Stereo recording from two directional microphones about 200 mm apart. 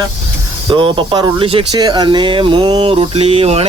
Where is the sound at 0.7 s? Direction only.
25° right (ahead or behind).